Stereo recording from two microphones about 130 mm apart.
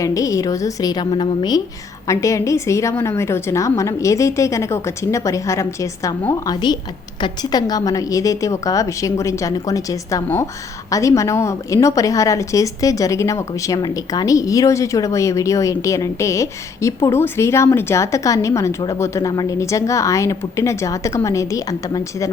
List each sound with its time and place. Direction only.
0.0 s a woman's voice: 25° left (ahead or behind)
2.0 s a woman's voice: 25° left (ahead or behind)